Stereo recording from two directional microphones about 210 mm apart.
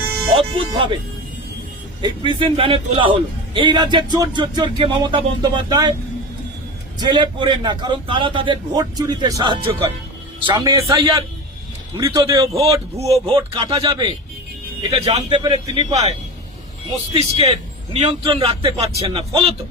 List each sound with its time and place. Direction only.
0.3 s a man's voice: 25° right (ahead or behind)
2.0 s a man's voice: 20° right (ahead or behind)
7.0 s a man's voice: 20° right (ahead or behind)
13.0 s a man's voice: 30° right (ahead or behind)
17.2 s a man's voice: 30° right (ahead or behind)